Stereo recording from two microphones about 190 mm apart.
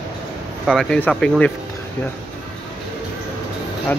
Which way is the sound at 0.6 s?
Centre (ahead or behind).